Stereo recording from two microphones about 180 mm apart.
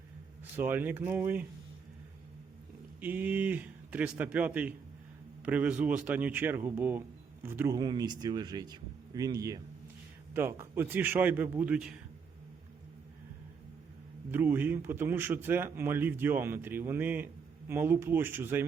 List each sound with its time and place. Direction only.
0.5 s a man's voice: 10° right (ahead or behind)
3.0 s a man's voice: 10° right (ahead or behind)
14.3 s a man's voice: 10° right (ahead or behind)